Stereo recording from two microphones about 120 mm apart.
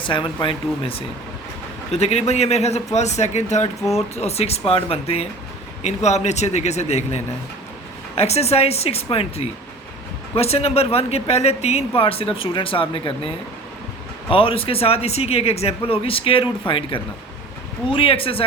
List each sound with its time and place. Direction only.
0.0 s speech: 45° left (ahead or behind)
1.9 s a man's voice: 65° left (ahead or behind)
3.9 s a man's voice: 60° left (ahead or behind)
5.8 s a man's voice: 65° left (ahead or behind); by 13.1 s 45° left (ahead or behind)
14.3 s speech: 50° left (ahead or behind)